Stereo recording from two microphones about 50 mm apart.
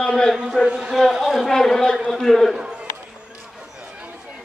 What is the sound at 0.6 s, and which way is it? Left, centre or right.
Speech, centre.